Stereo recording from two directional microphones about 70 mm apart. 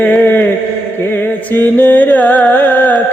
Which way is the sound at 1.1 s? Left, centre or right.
Left.